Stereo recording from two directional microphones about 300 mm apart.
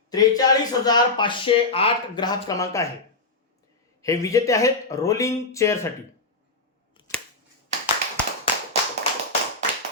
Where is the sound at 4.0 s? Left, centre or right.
Centre.